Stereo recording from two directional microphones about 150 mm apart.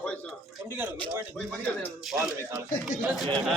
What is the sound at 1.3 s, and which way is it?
Speech, 5° left (ahead or behind).